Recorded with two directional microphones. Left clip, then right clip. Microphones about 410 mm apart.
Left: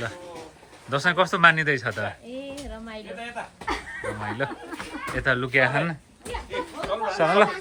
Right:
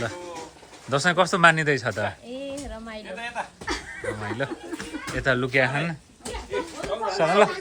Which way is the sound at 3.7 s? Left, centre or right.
Centre.